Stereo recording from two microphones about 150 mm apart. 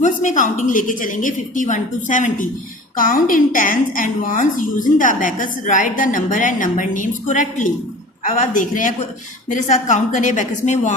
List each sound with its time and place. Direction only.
0.0 s a woman's voice: 55° left (ahead or behind)